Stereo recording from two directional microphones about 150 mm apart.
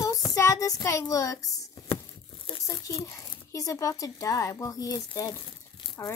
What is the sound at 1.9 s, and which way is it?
Tearing, 35° left (ahead or behind).